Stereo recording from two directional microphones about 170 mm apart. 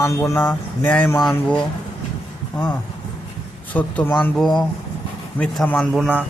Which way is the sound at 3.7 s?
10° left (ahead or behind).